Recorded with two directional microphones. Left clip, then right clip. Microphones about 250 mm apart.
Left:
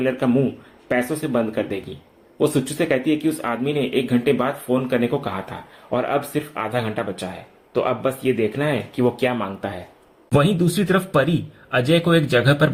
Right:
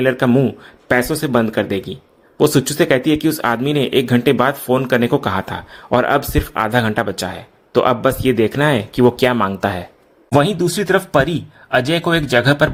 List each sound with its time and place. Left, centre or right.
0.0 s speech: right